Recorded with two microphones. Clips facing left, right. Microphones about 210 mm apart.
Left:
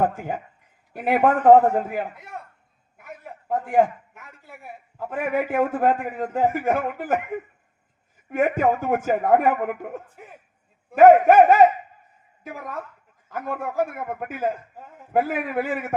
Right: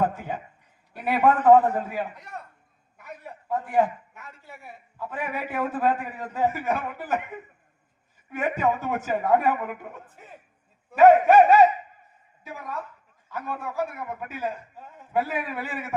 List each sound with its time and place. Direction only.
0.0 s a man's voice: 50° left (ahead or behind)
2.1 s a man's voice: 5° left (ahead or behind)
3.5 s a man's voice: 50° left (ahead or behind)
4.9 s a man's voice: 50° left (ahead or behind)
10.9 s a man's voice: 50° left (ahead or behind)